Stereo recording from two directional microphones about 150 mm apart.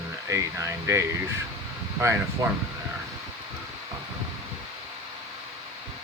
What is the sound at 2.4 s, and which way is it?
Speech, 20° right (ahead or behind).